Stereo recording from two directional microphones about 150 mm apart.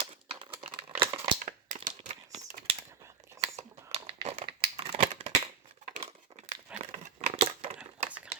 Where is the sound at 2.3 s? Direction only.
45° right (ahead or behind).